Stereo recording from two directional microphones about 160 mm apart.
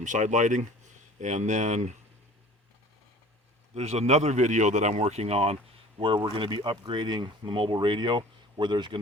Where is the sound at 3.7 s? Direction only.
40° right (ahead or behind).